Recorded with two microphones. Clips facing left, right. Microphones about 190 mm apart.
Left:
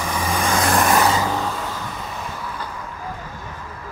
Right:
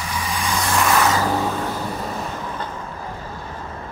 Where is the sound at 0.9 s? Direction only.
25° left (ahead or behind).